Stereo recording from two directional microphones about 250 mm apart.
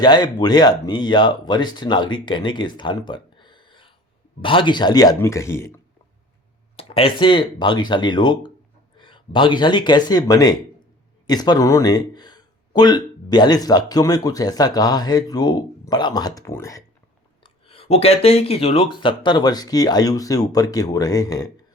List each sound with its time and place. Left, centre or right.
0.0 s speech: centre
6.7 s speech: left